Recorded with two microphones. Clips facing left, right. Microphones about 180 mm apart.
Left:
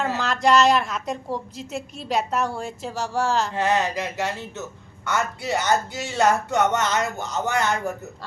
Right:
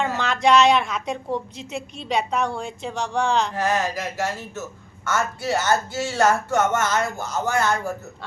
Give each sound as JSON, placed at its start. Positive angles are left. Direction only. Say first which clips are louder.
{"t": 0.0, "sound": "a woman's voice", "louder": "right 1 dB", "side_deg": 0}
{"t": 3.5, "sound": "speech", "louder": "left 1 dB", "side_deg": 20}